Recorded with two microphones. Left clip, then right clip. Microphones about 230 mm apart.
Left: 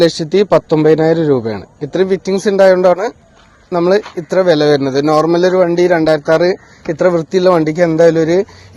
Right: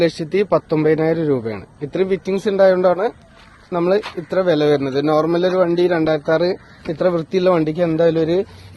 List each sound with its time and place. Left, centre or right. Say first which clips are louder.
0.0 s a man's voice: left 6 dB; left